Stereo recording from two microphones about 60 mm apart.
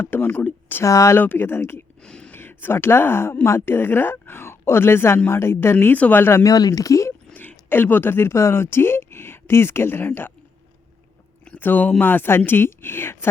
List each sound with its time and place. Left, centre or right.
0.1 s a woman's voice: left
0.8 s speech: left
1.1 s a woman's voice: left
2.0 s a sound: centre
2.3 s a woman's voice: left
5.8 s a woman's voice: left
6.4 s speech: left
7.7 s a woman's voice: left
11.5 s a woman's voice: left